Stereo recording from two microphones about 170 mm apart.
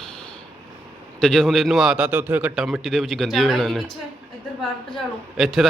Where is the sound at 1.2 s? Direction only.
5° left (ahead or behind).